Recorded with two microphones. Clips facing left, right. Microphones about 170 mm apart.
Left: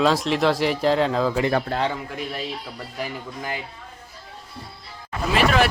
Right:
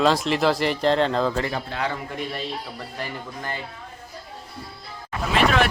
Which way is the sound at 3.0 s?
10° left (ahead or behind).